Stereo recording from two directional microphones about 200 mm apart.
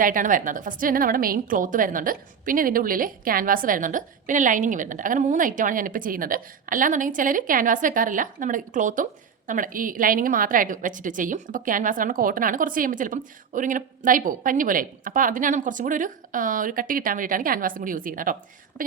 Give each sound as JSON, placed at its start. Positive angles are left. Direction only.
{"t": 0.0, "sound": "a woman's voice", "side_deg": -40}